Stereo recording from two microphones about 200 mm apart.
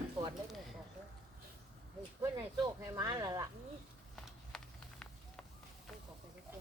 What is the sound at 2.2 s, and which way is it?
Speech, 15° right (ahead or behind).